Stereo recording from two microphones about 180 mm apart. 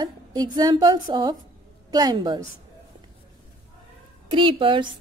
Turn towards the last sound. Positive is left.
turn(degrees=-25)  # may be behind; listen again after turning